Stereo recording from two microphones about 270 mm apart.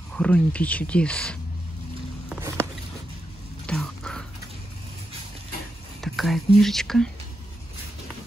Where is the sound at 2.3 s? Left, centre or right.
Centre.